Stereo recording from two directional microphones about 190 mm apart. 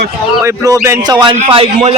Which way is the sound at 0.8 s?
15° right (ahead or behind).